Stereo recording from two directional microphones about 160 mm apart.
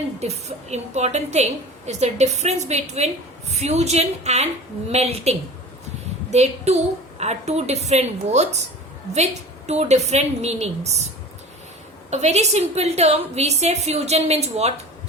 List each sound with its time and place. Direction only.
0.2 s a woman's voice: 45° right (ahead or behind)
12.1 s a woman's voice: 45° right (ahead or behind)